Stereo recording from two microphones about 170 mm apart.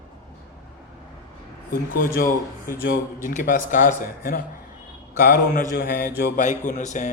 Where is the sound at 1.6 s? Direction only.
55° left (ahead or behind).